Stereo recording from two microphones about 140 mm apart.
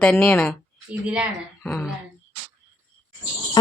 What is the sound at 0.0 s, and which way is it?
Speech, 10° left (ahead or behind).